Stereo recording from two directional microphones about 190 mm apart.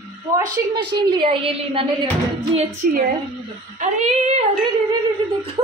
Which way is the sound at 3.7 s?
35° right (ahead or behind).